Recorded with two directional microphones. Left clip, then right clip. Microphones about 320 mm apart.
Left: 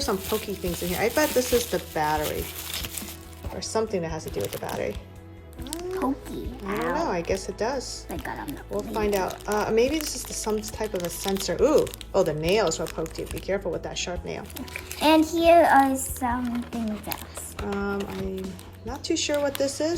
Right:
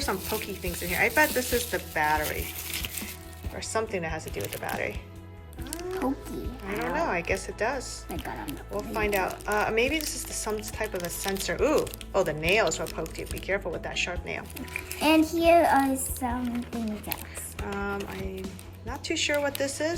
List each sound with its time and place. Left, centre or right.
0.3 s a child's voice: centre
1.7 s speech: centre
3.6 s speech: centre
6.7 s a child's voice: centre
6.9 s speech: centre
8.1 s a child's voice: centre